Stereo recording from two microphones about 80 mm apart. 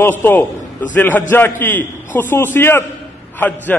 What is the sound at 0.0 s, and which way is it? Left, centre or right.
A man's voice, left.